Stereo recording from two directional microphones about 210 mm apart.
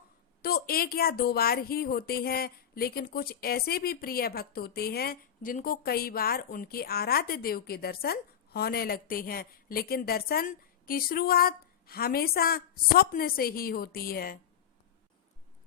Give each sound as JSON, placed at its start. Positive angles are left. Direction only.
{"t": 0.4, "sound": "a woman's voice", "side_deg": 45}